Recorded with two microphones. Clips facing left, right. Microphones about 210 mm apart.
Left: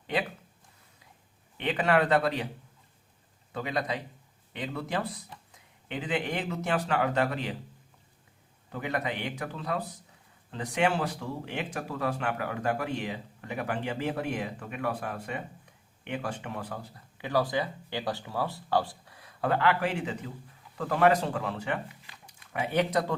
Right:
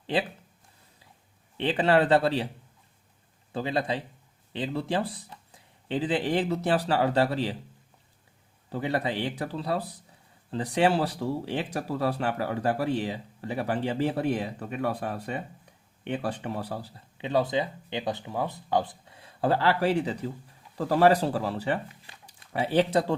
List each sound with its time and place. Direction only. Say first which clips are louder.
0.1 s speech: right 3 dB; 30° right (ahead or behind)
1.5 s speech: right 3 dB; 30° right (ahead or behind)
3.5 s speech: right 3 dB; 30° right (ahead or behind)
8.7 s speech: right 4 dB; 30° right (ahead or behind)